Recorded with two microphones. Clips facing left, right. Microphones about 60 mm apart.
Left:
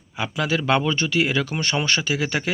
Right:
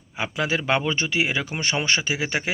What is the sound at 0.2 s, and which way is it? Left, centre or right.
Speech, right.